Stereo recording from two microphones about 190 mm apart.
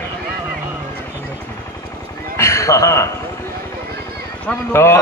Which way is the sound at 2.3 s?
15° left (ahead or behind).